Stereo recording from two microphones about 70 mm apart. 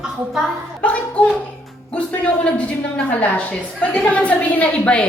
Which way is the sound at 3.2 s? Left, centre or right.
Left.